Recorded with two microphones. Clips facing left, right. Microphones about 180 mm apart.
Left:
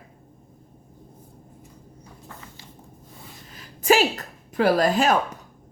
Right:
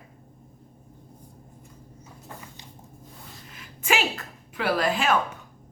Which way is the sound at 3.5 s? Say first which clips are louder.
Left 8 dB; 40° left (ahead or behind).